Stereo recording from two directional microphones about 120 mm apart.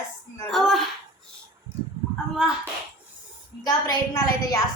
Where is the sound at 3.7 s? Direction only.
30° left (ahead or behind).